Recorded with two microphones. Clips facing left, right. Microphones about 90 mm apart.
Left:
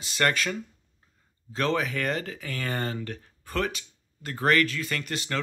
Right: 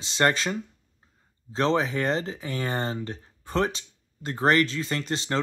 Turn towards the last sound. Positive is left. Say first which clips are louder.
# right 3 dB
turn(degrees=-30)  # may be behind; listen again after turning